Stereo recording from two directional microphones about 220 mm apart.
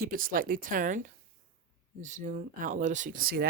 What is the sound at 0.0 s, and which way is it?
Speech, 40° right (ahead or behind).